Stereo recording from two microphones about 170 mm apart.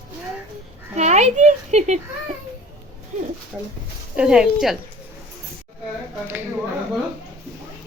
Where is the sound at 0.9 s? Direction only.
40° right (ahead or behind).